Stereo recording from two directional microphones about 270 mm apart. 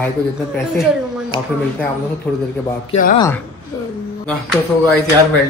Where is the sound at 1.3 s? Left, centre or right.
Centre.